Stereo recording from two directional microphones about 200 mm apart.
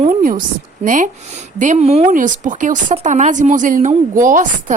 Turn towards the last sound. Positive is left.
turn(degrees=-40)  # may be behind; listen again after turning